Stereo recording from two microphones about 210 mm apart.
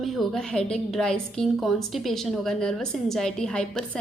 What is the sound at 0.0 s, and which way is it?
A woman's voice, centre (ahead or behind).